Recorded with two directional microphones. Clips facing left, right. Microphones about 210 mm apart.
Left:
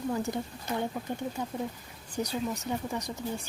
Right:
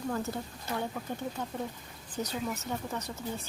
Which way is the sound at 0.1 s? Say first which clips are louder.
Left 2 dB; 15° left (ahead or behind).